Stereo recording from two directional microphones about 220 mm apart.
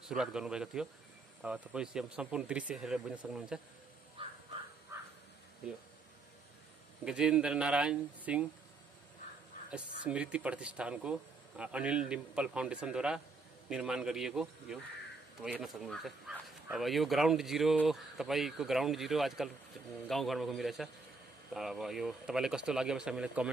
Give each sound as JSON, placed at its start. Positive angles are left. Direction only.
{"t": 0.1, "sound": "speech", "side_deg": -5}
{"t": 4.2, "sound": "crow", "side_deg": -25}
{"t": 4.9, "sound": "crow", "side_deg": -10}
{"t": 7.1, "sound": "speech", "side_deg": -5}
{"t": 9.7, "sound": "speech", "side_deg": -5}